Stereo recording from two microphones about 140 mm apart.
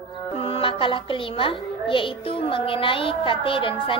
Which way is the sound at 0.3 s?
45° left (ahead or behind).